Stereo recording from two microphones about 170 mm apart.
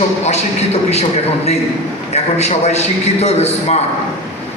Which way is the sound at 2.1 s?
40° left (ahead or behind).